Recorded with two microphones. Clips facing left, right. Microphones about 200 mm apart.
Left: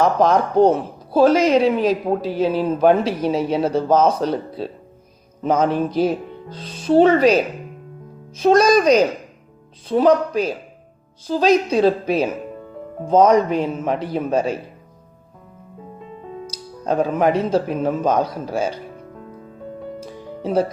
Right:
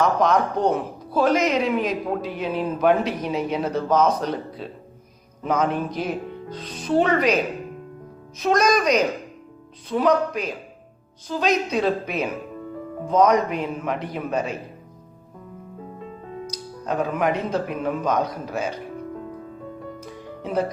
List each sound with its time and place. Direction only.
0.0 s speech: 30° left (ahead or behind)
8.4 s speech: 30° left (ahead or behind)
16.5 s speech: 30° left (ahead or behind)
20.0 s music: 30° left (ahead or behind)